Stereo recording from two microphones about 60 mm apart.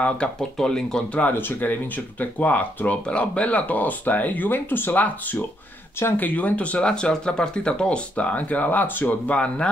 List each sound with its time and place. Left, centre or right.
0.0 s speech: centre
1.3 s speech: left
6.9 s speech: centre; by 9.1 s left
9.3 s speech: centre